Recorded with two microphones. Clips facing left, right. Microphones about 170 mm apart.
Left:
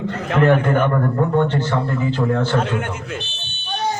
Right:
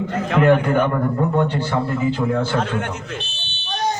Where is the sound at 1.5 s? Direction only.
10° right (ahead or behind).